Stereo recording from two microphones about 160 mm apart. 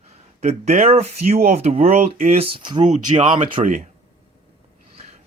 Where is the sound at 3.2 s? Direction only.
50° right (ahead or behind).